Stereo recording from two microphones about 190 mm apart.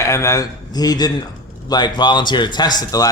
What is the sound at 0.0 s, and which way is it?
Speech, 15° left (ahead or behind).